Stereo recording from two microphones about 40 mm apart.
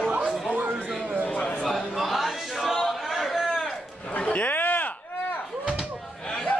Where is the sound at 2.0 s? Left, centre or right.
Centre.